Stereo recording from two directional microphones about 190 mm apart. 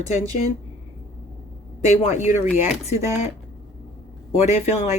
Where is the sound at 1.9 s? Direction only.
40° left (ahead or behind).